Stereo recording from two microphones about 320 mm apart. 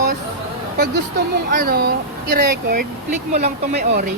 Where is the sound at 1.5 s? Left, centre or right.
Right.